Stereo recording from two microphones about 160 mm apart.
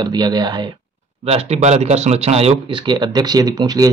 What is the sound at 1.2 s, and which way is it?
Speech, 40° right (ahead or behind).